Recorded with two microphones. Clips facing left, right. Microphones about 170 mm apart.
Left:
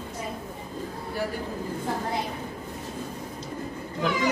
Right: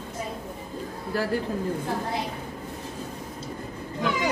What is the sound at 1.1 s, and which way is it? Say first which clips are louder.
Speech: right 3 dB; 90° right.